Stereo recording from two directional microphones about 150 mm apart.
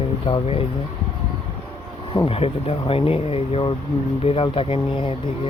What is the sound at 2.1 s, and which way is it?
Speech, 40° left (ahead or behind).